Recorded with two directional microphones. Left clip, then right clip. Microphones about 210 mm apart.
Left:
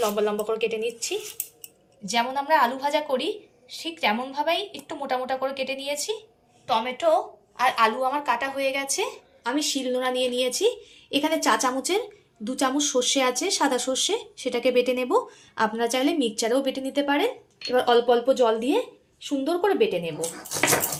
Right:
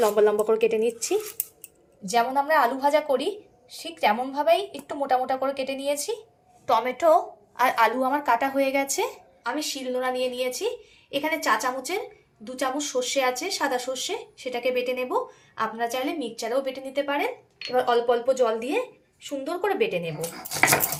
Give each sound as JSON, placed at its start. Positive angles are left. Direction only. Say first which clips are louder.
{"t": 0.0, "sound": "a woman's voice", "louder": "right 4 dB", "side_deg": -35}
{"t": 6.7, "sound": "a woman's voice", "louder": "right 2 dB", "side_deg": -50}
{"t": 9.4, "sound": "a woman's voice", "louder": "left 3 dB", "side_deg": 40}